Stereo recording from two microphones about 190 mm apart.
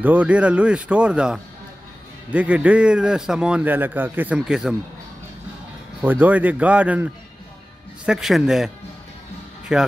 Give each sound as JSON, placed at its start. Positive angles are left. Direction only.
{"t": 0.0, "sound": "a man's voice", "side_deg": -10}
{"t": 6.0, "sound": "a man's voice", "side_deg": -10}